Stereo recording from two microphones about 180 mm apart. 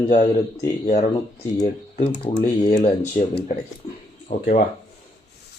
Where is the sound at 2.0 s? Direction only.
40° left (ahead or behind).